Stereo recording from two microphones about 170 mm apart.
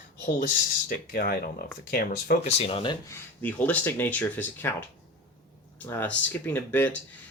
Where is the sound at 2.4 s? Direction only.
35° left (ahead or behind).